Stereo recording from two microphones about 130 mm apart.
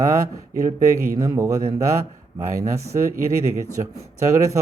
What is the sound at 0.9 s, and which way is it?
A man's voice, 25° right (ahead or behind).